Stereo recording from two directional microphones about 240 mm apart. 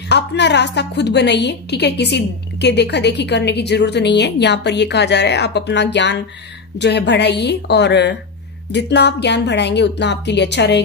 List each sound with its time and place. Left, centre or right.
0.1 s a woman's voice: left